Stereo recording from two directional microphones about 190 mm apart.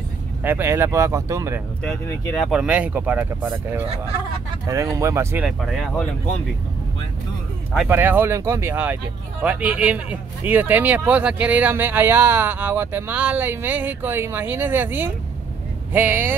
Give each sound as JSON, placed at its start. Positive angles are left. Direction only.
{"t": 0.4, "sound": "speech", "side_deg": -10}
{"t": 1.9, "sound": "speech", "side_deg": 5}
{"t": 4.6, "sound": "speech", "side_deg": -15}
{"t": 5.6, "sound": "speech", "side_deg": 0}
{"t": 7.7, "sound": "speech", "side_deg": -5}